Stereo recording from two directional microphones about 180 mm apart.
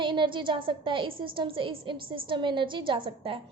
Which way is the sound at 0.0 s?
25° right (ahead or behind).